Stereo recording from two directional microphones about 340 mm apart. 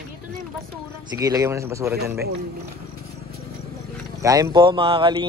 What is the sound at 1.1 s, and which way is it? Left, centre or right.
Speech, centre.